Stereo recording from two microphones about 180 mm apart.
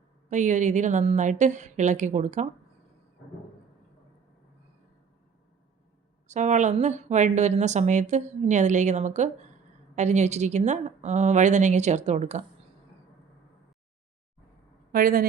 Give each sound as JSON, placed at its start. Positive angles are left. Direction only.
{"t": 0.3, "sound": "a woman's voice", "side_deg": -40}
{"t": 6.2, "sound": "a woman's voice", "side_deg": -40}
{"t": 14.9, "sound": "a woman's voice", "side_deg": -50}